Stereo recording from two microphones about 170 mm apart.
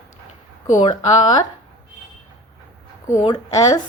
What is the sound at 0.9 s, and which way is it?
Speech, 25° left (ahead or behind).